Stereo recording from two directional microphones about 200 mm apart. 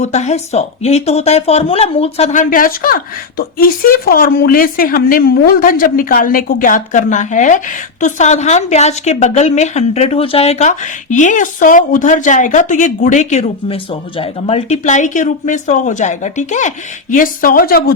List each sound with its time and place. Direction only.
0.0 s a woman's voice: 35° left (ahead or behind)